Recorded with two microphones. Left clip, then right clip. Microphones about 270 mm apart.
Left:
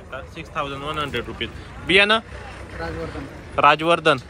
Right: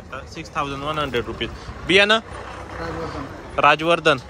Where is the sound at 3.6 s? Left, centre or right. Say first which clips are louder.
Even; centre.